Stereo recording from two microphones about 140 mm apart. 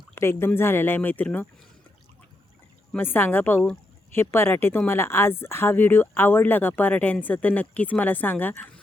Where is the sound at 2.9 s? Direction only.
15° left (ahead or behind).